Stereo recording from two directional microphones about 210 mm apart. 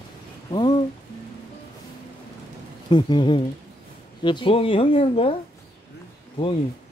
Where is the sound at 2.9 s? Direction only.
20° left (ahead or behind).